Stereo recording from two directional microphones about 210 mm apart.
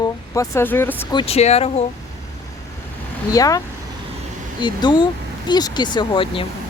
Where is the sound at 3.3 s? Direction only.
15° left (ahead or behind).